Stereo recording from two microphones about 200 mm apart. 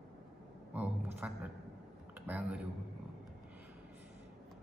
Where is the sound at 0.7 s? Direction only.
10° right (ahead or behind).